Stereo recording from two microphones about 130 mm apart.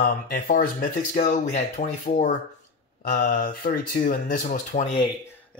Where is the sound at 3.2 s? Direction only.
90° left.